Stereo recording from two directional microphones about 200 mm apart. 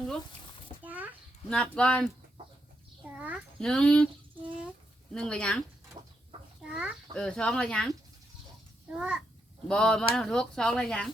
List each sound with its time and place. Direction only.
0.9 s a child's voice: 10° right (ahead or behind)
1.5 s a child's voice: 5° left (ahead or behind)
3.0 s a sound: 5° right (ahead or behind)
5.1 s a child's voice: 5° left (ahead or behind)
6.0 s chicken: 35° right (ahead or behind)
6.6 s a child's voice: 5° right (ahead or behind)
8.9 s a child's voice: 5° right (ahead or behind)